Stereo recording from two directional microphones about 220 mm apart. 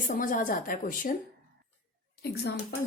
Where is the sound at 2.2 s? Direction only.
45° left (ahead or behind).